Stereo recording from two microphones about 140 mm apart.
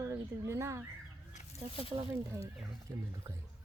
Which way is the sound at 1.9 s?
40° right (ahead or behind).